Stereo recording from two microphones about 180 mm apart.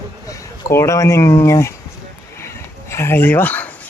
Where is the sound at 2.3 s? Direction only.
15° left (ahead or behind).